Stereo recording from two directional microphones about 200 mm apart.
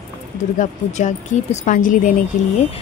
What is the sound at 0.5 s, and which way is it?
A woman's voice, 35° left (ahead or behind).